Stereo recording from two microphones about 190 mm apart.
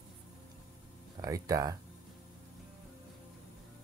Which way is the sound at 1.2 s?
20° right (ahead or behind).